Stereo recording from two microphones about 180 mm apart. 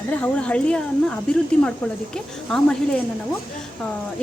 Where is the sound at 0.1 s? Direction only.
5° left (ahead or behind).